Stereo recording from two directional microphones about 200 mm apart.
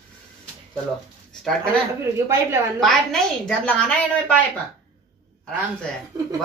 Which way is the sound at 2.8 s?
Centre (ahead or behind).